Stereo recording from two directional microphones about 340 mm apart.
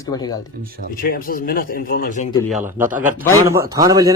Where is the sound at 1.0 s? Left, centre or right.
Left.